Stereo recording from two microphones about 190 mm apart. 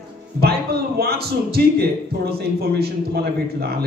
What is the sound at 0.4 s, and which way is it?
A man's voice, 55° right (ahead or behind).